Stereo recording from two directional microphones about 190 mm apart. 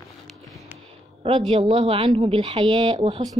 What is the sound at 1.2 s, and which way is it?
A woman's voice, 30° right (ahead or behind).